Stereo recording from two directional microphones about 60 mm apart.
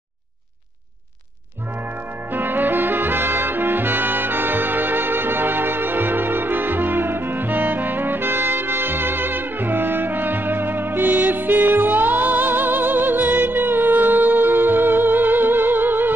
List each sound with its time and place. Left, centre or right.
2.3 s music: right